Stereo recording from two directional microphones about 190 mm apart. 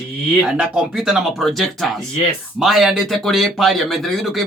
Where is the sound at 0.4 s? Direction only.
5° right (ahead or behind).